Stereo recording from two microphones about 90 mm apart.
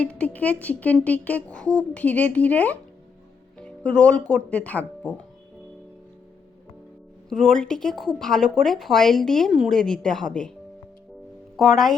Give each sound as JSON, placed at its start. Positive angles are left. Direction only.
{"t": 0.0, "sound": "speech", "side_deg": 15}
{"t": 7.3, "sound": "speech", "side_deg": 5}
{"t": 11.5, "sound": "speech", "side_deg": 0}